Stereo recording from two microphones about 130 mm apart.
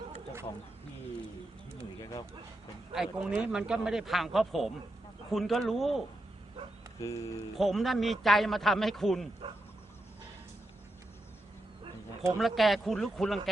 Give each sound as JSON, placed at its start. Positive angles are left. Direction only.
{"t": 2.0, "sound": "a sound", "side_deg": 30}
{"t": 2.9, "sound": "speech", "side_deg": -5}
{"t": 7.0, "sound": "speech", "side_deg": 25}
{"t": 7.5, "sound": "speech", "side_deg": 0}
{"t": 9.4, "sound": "insect", "side_deg": -40}
{"t": 12.4, "sound": "speech", "side_deg": 0}